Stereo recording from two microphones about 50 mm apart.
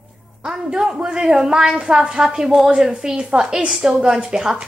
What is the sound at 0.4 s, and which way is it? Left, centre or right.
A woman's voice, centre.